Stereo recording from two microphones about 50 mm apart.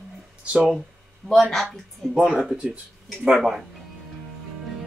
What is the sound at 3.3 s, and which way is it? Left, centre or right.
Speech, centre.